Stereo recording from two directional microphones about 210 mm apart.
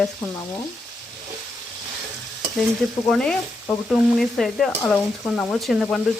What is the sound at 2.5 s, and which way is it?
Frying, centre (ahead or behind).